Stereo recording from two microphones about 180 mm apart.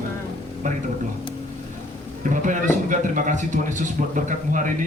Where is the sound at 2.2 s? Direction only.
45° right (ahead or behind).